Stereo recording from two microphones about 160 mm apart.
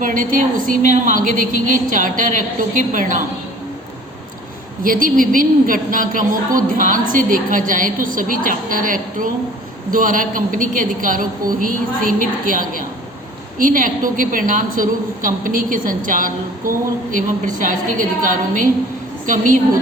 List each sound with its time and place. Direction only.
0.0 s a woman's voice: 55° right (ahead or behind)
4.8 s a woman's voice: 60° right (ahead or behind)